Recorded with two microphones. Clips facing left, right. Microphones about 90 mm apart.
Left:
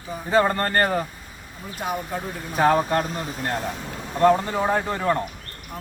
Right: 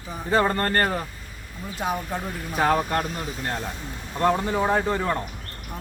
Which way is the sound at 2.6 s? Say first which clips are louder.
Left 3 dB; 20° left (ahead or behind).